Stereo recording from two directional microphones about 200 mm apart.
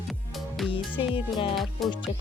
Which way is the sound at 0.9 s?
25° left (ahead or behind).